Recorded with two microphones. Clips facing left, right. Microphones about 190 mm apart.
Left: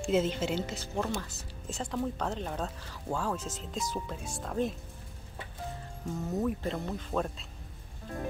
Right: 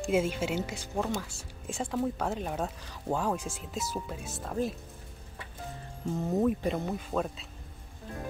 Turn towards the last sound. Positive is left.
turn(degrees=0)  # may be behind; listen again after turning